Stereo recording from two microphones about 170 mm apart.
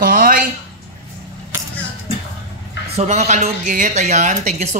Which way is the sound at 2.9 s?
40° right (ahead or behind).